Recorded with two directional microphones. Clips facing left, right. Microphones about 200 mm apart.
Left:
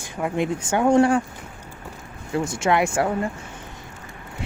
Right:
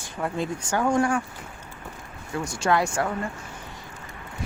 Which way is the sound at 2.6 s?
20° left (ahead or behind).